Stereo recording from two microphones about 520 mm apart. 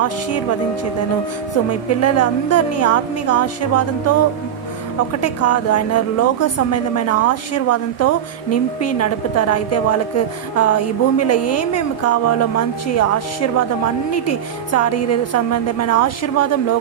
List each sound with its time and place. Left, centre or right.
0.0 s a woman's voice: left
1.6 s a woman's voice: left